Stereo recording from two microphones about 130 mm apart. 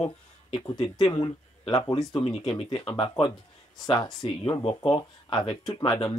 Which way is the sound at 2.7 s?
40° left (ahead or behind).